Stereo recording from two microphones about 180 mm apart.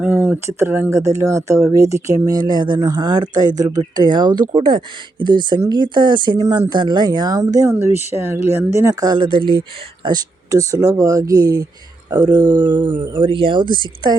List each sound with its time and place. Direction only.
0.0 s speech: 10° right (ahead or behind); by 13.7 s 25° right (ahead or behind)